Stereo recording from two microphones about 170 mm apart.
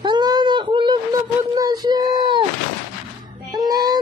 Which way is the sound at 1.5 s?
20° right (ahead or behind).